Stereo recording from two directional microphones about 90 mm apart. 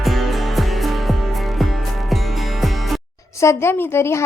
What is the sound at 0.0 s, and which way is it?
Music, centre (ahead or behind).